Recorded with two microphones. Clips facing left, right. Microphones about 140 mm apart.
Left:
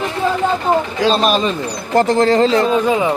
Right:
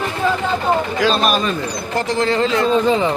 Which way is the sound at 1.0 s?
30° left (ahead or behind).